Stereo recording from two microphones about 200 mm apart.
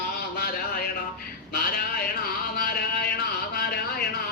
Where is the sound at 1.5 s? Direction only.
50° left (ahead or behind).